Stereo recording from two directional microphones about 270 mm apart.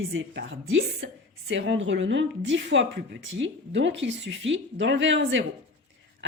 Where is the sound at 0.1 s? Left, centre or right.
Right.